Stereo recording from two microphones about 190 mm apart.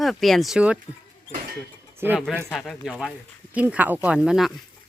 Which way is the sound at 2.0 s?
10° right (ahead or behind).